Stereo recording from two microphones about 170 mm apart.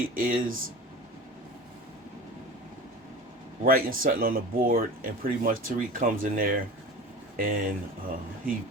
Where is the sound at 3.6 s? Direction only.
60° right (ahead or behind).